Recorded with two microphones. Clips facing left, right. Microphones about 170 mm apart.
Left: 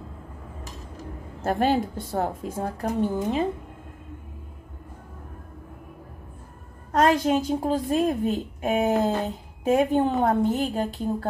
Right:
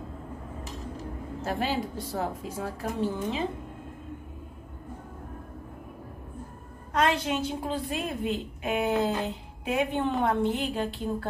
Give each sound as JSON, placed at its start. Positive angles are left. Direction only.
{"t": 1.4, "sound": "a woman's voice", "side_deg": 50}
{"t": 6.9, "sound": "a woman's voice", "side_deg": 45}